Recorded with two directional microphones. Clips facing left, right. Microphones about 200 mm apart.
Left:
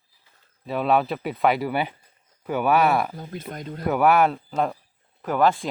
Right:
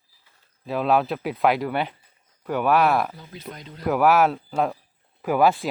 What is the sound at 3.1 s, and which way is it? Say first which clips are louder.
Speech: left 5 dB; 50° left (ahead or behind).